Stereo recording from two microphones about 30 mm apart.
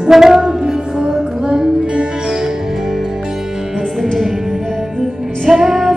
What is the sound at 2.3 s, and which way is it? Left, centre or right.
Music, centre.